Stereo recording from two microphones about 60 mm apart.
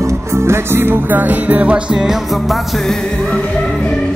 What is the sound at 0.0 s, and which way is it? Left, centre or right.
Music, right.